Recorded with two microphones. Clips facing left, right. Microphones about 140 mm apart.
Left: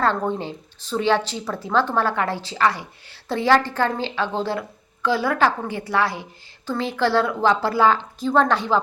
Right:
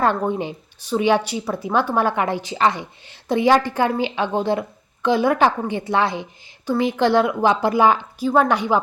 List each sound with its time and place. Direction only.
0.0 s a woman's voice: 15° right (ahead or behind)